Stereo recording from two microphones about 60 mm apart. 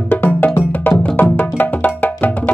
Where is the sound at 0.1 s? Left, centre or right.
Left.